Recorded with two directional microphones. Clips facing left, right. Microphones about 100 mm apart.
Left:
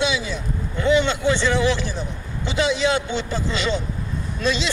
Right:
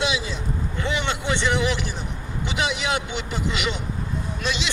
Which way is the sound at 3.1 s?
15° right (ahead or behind).